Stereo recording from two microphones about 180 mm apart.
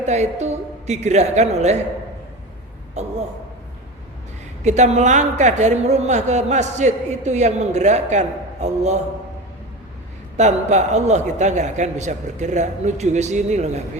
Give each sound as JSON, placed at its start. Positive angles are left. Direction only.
{"t": 0.0, "sound": "speech", "side_deg": -40}
{"t": 3.0, "sound": "speech", "side_deg": -40}
{"t": 4.6, "sound": "speech", "side_deg": -40}
{"t": 10.3, "sound": "speech", "side_deg": -40}